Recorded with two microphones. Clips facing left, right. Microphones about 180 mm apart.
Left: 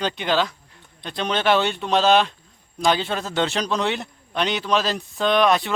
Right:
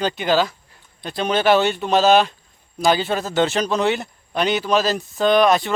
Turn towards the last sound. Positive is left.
turn(degrees=0)  # may be behind; listen again after turning